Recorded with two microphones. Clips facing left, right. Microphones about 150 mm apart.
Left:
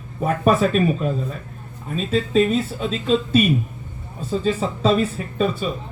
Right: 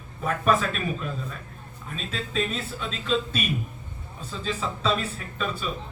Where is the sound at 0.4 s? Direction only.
40° left (ahead or behind).